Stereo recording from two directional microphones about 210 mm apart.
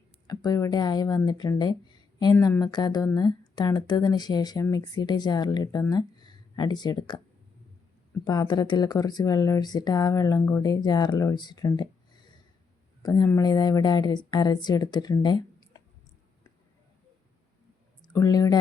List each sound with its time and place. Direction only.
0.3 s speech: 15° left (ahead or behind)
8.2 s speech: 20° left (ahead or behind)
13.0 s speech: 15° left (ahead or behind)
18.0 s speech: 15° left (ahead or behind)